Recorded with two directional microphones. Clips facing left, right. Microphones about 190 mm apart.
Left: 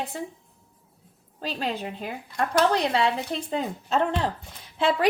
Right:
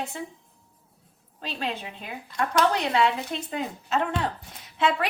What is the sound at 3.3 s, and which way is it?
A woman's voice, 30° left (ahead or behind).